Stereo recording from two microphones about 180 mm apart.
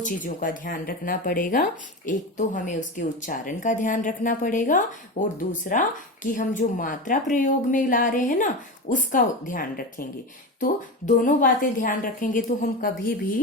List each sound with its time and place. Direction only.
0.0 s speech: 45° left (ahead or behind)